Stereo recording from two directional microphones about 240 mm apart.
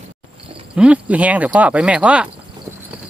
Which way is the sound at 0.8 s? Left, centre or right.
Centre.